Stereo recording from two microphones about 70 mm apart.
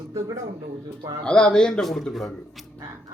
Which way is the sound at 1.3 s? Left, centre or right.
Centre.